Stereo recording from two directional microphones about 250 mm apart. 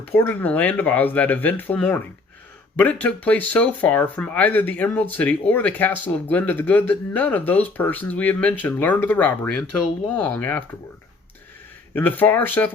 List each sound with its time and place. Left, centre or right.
0.0 s speech: centre
11.9 s speech: centre